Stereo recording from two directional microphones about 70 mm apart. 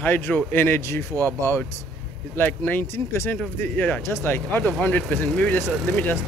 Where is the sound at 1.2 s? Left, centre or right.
Left.